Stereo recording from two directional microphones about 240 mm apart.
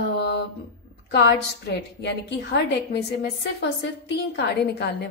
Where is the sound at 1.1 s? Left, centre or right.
Left.